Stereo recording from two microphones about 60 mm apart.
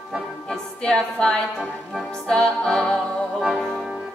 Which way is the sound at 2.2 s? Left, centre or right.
Centre.